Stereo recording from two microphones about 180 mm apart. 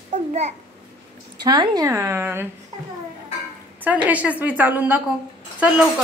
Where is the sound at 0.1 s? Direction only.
40° right (ahead or behind).